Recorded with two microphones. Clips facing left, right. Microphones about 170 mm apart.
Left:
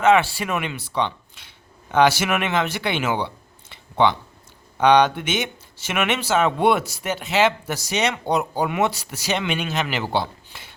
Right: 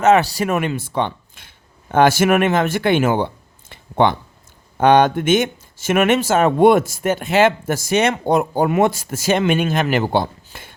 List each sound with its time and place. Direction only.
0.0 s speech: 40° right (ahead or behind)